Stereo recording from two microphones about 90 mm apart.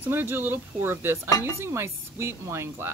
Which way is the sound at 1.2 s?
35° left (ahead or behind).